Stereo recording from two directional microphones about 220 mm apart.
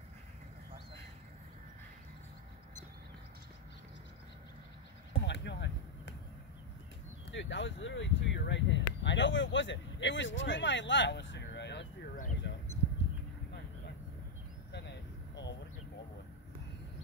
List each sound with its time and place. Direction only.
5.2 s basketball bounce: 50° left (ahead or behind)
7.2 s speech: 55° left (ahead or behind)
12.4 s a sound: 50° left (ahead or behind)
14.7 s vehicle: 50° left (ahead or behind)